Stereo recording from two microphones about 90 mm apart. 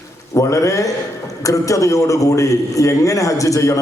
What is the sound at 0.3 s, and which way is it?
A man's voice, 35° left (ahead or behind).